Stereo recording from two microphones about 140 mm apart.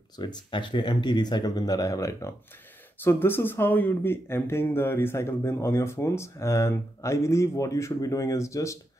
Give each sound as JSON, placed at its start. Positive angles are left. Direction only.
{"t": 0.2, "sound": "speech", "side_deg": 35}